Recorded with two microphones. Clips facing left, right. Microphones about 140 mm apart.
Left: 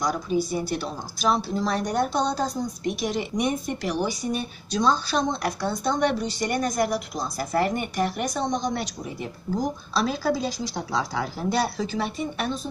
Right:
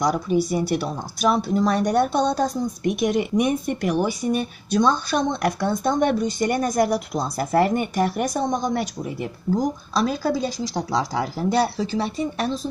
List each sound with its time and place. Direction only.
0.0 s a woman's voice: 65° right (ahead or behind); by 12.5 s 35° right (ahead or behind)